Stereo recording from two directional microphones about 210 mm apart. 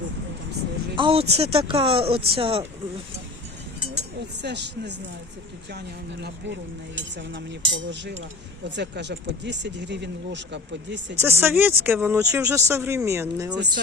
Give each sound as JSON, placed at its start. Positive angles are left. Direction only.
{"t": 0.9, "sound": "speech", "side_deg": -25}
{"t": 4.4, "sound": "speech", "side_deg": -55}
{"t": 6.2, "sound": "speech", "side_deg": -60}
{"t": 11.2, "sound": "speech", "side_deg": -10}